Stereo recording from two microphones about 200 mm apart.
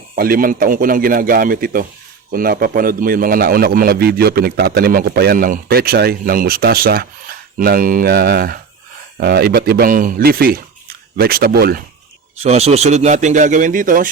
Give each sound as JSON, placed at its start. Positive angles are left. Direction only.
{"t": 0.2, "sound": "a man's voice", "side_deg": -45}
{"t": 12.4, "sound": "a man's voice", "side_deg": -30}